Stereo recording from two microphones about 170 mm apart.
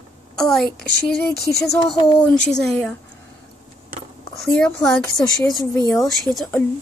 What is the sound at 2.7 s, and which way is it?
Speech, 5° left (ahead or behind).